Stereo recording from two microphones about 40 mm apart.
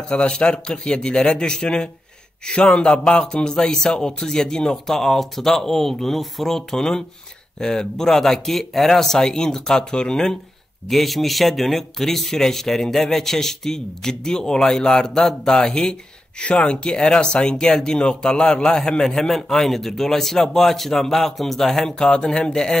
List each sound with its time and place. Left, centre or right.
0.1 s speech: left
10.9 s speech: centre
19.0 s speech: centre